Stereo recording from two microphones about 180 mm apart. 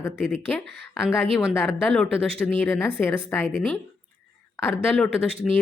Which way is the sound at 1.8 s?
5° left (ahead or behind).